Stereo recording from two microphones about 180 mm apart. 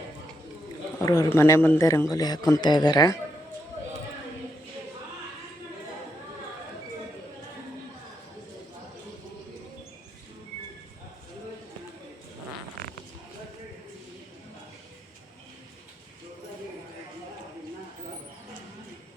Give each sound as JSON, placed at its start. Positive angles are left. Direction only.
{"t": 0.9, "sound": "a man's voice", "side_deg": 15}